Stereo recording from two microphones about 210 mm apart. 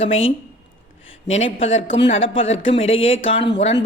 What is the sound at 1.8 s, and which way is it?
A man's voice, 60° left (ahead or behind).